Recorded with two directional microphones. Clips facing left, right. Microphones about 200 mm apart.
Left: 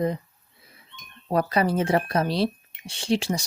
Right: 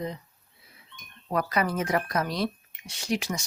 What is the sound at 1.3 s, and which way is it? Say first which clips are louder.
Speech: left 4 dB; 30° left (ahead or behind).